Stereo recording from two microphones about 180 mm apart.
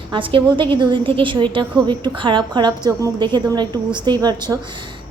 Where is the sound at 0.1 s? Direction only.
30° right (ahead or behind).